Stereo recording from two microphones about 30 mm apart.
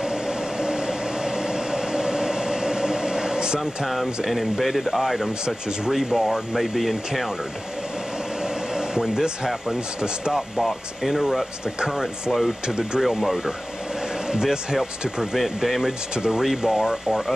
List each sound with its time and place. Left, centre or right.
0.0 s train: right
3.8 s speech: centre
8.4 s air conditioning: right
9.1 s speech: right
10.6 s speech: centre
12.6 s speech: right
14.3 s speech: right
15.3 s speech: centre
16.2 s speech: centre